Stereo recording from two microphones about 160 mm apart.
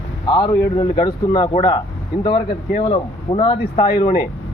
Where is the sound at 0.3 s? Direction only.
30° left (ahead or behind).